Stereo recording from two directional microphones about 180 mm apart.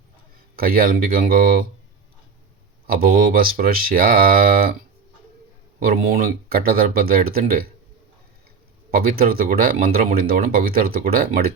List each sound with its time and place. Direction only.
0.5 s speech: 55° right (ahead or behind)
2.8 s speech: 55° right (ahead or behind)
5.8 s speech: 55° right (ahead or behind)
8.9 s speech: 55° right (ahead or behind)